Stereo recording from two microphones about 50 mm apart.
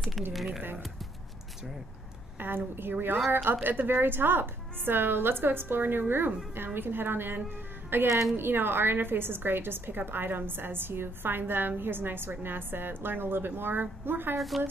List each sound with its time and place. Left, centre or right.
0.3 s speech: centre
2.3 s a woman's voice: right
14.5 s speech: centre